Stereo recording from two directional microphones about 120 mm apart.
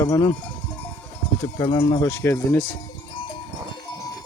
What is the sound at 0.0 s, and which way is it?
Cowbell, 30° left (ahead or behind).